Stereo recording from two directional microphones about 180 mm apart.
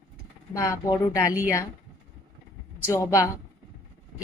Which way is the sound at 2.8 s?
15° left (ahead or behind).